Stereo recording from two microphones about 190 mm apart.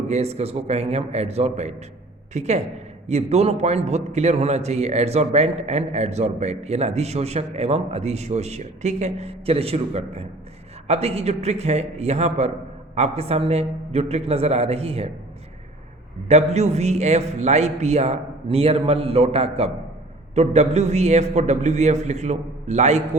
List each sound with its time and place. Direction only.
0.1 s a man's voice: 35° right (ahead or behind)
16.3 s a man's voice: 35° right (ahead or behind)